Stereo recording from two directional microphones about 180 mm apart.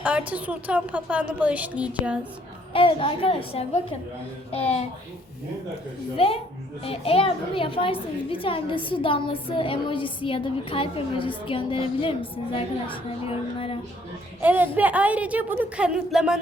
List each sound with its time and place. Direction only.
0.0 s a woman's voice: 10° right (ahead or behind)
2.7 s a woman's voice: 30° left (ahead or behind)
6.1 s a woman's voice: 30° left (ahead or behind)
14.4 s a woman's voice: 10° right (ahead or behind)